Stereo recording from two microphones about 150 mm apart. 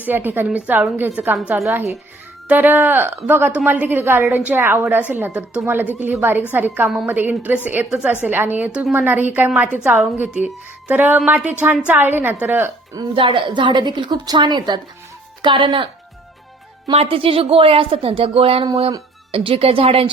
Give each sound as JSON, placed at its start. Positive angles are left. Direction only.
{"t": 0.0, "sound": "a woman's voice", "side_deg": -10}
{"t": 13.1, "sound": "a woman's voice", "side_deg": -35}